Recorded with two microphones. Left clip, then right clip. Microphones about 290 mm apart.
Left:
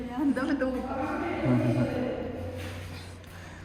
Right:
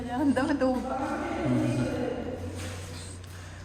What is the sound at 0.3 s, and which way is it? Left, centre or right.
Speech, right.